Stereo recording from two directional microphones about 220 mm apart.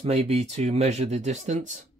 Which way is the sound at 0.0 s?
30° right (ahead or behind).